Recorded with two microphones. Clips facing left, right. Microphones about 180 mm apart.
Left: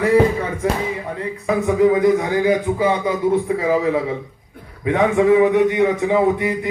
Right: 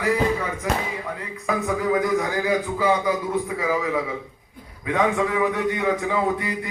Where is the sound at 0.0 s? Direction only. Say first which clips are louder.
Left 7 dB; 30° left (ahead or behind).